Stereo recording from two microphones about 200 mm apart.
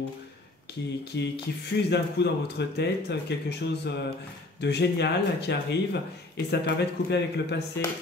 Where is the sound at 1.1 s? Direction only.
60° left (ahead or behind).